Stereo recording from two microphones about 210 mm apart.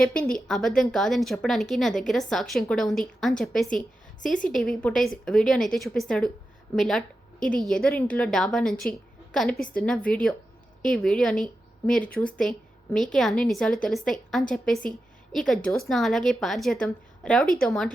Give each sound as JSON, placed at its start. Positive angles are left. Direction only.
{"t": 0.0, "sound": "a woman's voice", "side_deg": 5}